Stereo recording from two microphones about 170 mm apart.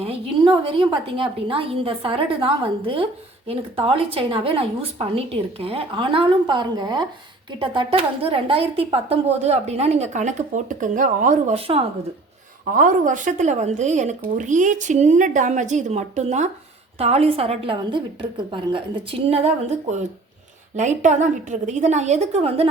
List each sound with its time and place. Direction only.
0.0 s a woman's voice: 35° right (ahead or behind)
12.7 s a woman's voice: 50° right (ahead or behind)